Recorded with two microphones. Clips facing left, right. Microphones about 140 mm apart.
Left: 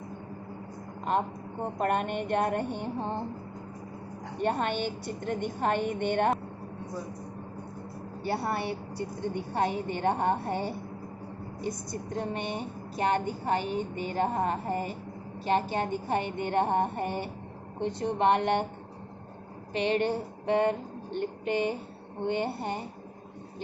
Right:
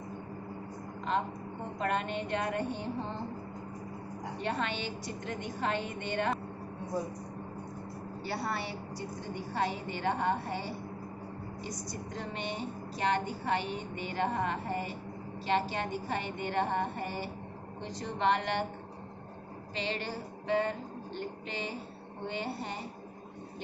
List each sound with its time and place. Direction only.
1.8 s a woman's voice: 55° left (ahead or behind)
4.4 s a woman's voice: 50° left (ahead or behind)
8.4 s a woman's voice: 55° left (ahead or behind)
19.7 s a sound: 55° left (ahead or behind)
22.3 s a woman's voice: 55° left (ahead or behind)